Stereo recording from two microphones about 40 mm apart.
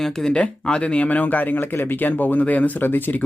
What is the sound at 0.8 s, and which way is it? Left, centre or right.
Speech, left.